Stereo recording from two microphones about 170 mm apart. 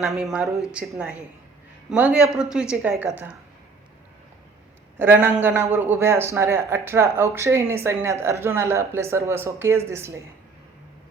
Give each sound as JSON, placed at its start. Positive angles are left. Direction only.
{"t": 0.0, "sound": "speech", "side_deg": 0}
{"t": 4.9, "sound": "speech", "side_deg": -10}